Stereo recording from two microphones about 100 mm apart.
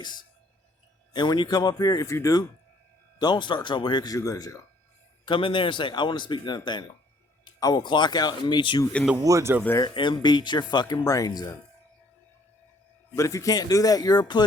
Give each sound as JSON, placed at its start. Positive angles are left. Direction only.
{"t": 0.0, "sound": "a sound", "side_deg": 45}
{"t": 1.1, "sound": "speech", "side_deg": 50}
{"t": 3.2, "sound": "a man's voice", "side_deg": 50}
{"t": 4.1, "sound": "speech", "side_deg": 35}
{"t": 5.2, "sound": "a man's voice", "side_deg": 55}
{"t": 9.2, "sound": "speech", "side_deg": -30}
{"t": 9.9, "sound": "a man's voice", "side_deg": 50}
{"t": 10.9, "sound": "speech", "side_deg": 35}
{"t": 13.1, "sound": "speech", "side_deg": 30}